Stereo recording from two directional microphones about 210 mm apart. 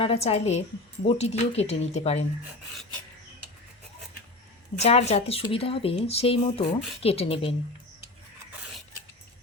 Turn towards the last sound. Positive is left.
turn(degrees=25)  # may be behind; listen again after turning